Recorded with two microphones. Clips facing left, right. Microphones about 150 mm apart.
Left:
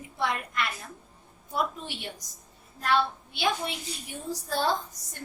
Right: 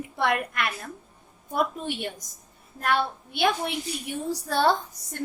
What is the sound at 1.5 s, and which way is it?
A woman's voice, 50° right (ahead or behind).